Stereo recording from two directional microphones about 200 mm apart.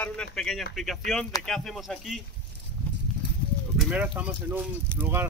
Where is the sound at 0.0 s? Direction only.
5° left (ahead or behind).